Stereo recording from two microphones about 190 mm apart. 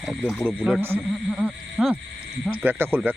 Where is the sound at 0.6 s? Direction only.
10° right (ahead or behind).